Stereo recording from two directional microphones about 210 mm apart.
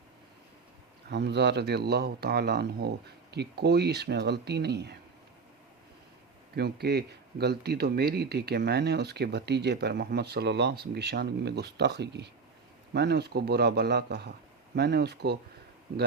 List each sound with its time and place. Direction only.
1.1 s speech: 55° right (ahead or behind)
6.6 s speech: 50° right (ahead or behind)